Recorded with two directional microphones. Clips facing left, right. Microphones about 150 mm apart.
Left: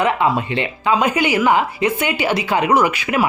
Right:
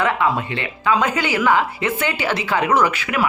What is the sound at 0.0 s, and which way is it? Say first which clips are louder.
Speech: left 2 dB; 20° left (ahead or behind).